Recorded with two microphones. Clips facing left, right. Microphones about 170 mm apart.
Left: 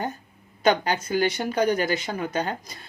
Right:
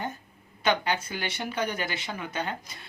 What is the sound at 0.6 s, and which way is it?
Speech, 40° left (ahead or behind).